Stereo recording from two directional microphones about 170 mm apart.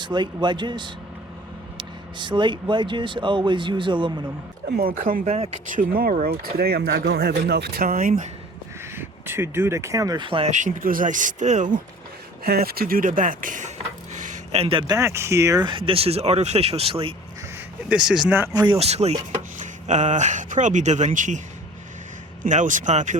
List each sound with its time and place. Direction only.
0.0 s speech: 25° right (ahead or behind)
4.7 s speech: 60° right (ahead or behind)
9.0 s speech: 15° right (ahead or behind); by 10.5 s 30° right (ahead or behind)
10.5 s speech: 50° right (ahead or behind)
12.5 s speech: 65° right (ahead or behind); by 15.8 s 25° right (ahead or behind)
15.9 s speech: 35° right (ahead or behind)
17.8 s speech: 5° right (ahead or behind)
18.6 s speech: 35° right (ahead or behind)
22.4 s speech: 45° right (ahead or behind)